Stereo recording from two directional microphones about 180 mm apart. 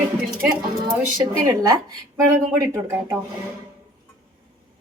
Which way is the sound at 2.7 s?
15° right (ahead or behind).